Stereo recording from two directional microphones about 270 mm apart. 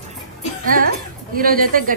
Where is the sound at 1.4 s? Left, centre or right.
Right.